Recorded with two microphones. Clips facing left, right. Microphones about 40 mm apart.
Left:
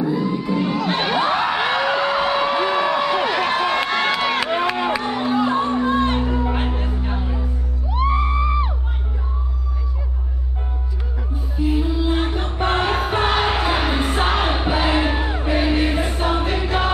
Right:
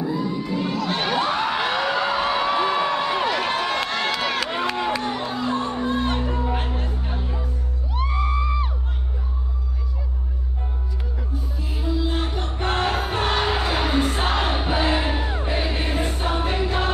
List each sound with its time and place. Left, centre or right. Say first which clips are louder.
0.1 s children shouting: left 4 dB; centre
5.9 s music: left 4 dB; centre
11.5 s music: left 8 dB; left
15.6 s music: left 5 dB; centre